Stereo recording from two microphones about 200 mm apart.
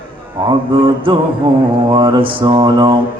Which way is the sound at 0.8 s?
25° right (ahead or behind).